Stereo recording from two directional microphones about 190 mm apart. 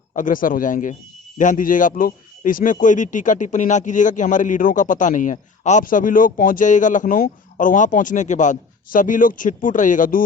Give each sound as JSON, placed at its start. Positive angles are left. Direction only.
{"t": 0.1, "sound": "a man's voice", "side_deg": 45}